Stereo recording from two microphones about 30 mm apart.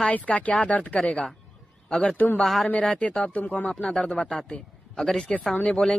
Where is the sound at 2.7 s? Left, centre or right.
Left.